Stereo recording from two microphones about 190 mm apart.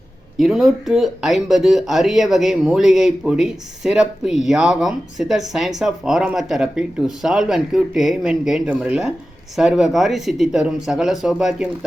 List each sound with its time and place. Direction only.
0.3 s speech: centre (ahead or behind)